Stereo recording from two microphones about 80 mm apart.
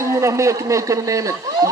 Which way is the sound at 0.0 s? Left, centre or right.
Right.